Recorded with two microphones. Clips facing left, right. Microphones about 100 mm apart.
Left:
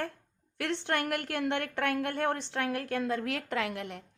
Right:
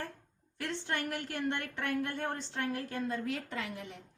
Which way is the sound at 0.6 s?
65° left (ahead or behind).